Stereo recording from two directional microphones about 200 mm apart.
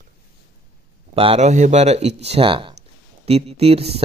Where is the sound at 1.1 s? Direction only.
30° right (ahead or behind).